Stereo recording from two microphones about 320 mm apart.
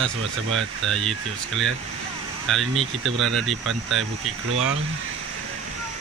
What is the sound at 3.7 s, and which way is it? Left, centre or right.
Speech, right.